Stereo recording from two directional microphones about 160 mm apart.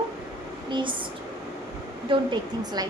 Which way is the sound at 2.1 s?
35° right (ahead or behind).